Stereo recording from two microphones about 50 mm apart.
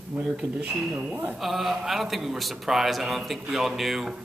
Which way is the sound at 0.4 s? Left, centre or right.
Centre.